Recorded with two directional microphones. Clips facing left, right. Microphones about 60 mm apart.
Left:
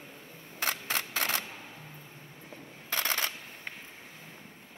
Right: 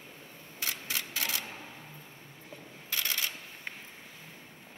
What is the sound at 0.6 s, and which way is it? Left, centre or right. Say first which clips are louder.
Camera: left 5 dB; left.